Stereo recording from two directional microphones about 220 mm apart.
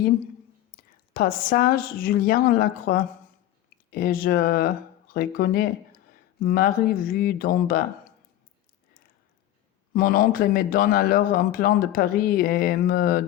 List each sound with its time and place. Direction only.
0.9 s a man's voice: 40° left (ahead or behind)
9.9 s a man's voice: 40° left (ahead or behind)